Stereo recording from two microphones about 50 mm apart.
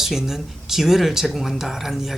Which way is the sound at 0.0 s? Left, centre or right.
Centre.